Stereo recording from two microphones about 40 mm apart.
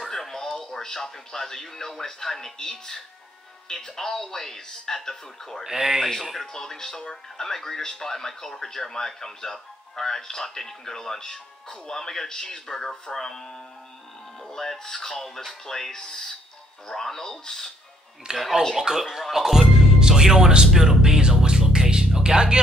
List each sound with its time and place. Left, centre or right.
0.0 s speech: centre
5.6 s speech: centre
6.3 s speech: centre
18.3 s speech: right
18.8 s speech: centre
19.3 s music: centre
20.0 s music: centre